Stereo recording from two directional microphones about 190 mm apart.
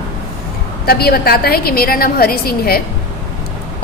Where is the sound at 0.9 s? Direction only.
55° left (ahead or behind).